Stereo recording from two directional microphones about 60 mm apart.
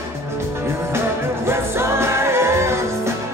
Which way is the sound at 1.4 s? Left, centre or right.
Right.